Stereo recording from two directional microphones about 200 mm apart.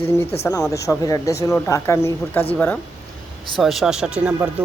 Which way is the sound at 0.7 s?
15° left (ahead or behind).